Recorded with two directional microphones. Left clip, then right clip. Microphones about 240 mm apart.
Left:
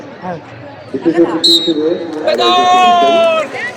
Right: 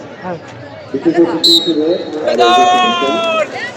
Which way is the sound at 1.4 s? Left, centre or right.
Centre.